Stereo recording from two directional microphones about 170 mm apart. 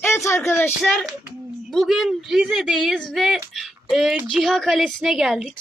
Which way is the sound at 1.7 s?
Centre (ahead or behind).